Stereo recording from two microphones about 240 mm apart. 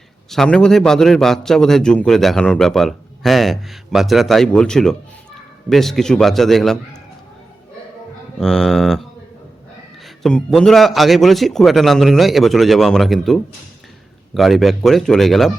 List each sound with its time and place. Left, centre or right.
0.3 s a man's voice: centre
8.4 s a man's voice: centre
10.2 s a man's voice: centre